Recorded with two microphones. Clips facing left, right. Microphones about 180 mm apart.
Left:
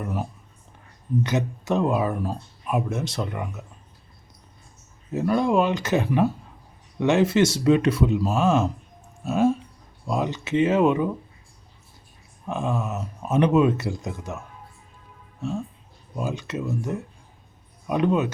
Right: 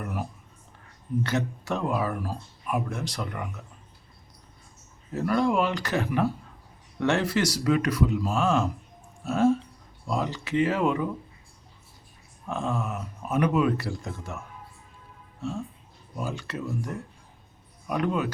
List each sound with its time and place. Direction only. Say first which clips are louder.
0.0 s a sound: left 3 dB; 25° left (ahead or behind)
1.2 s speech: left 2 dB; 20° left (ahead or behind)
5.1 s speech: left 3 dB; 20° left (ahead or behind)
12.5 s speech: left 3 dB; 15° left (ahead or behind)
16.1 s speech: left 4 dB; 20° left (ahead or behind)